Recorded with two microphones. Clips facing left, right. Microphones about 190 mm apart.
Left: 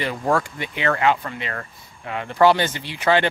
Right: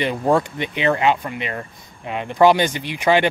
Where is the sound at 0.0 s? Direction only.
20° right (ahead or behind).